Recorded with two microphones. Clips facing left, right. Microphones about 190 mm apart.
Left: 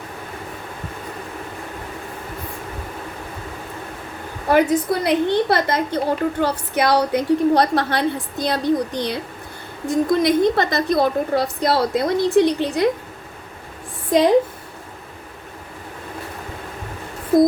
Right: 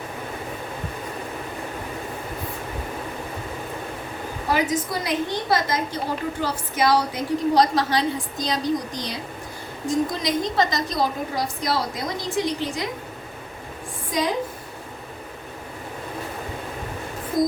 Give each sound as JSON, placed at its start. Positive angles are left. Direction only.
{"t": 4.5, "sound": "a woman's voice", "side_deg": 60}
{"t": 14.1, "sound": "a woman's voice", "side_deg": 60}